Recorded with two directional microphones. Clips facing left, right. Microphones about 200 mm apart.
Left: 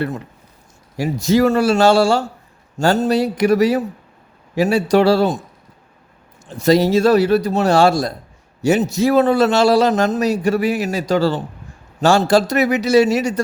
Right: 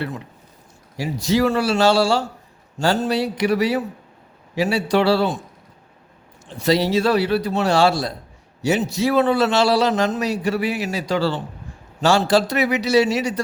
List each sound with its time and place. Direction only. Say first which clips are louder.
0.9 s a man's voice: left 4 dB; 50° left (ahead or behind)
6.5 s a man's voice: left 5 dB; 45° left (ahead or behind)